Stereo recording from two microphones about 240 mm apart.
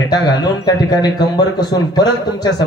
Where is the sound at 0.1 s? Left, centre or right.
Centre.